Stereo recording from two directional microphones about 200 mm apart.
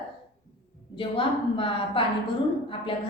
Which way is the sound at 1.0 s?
25° left (ahead or behind).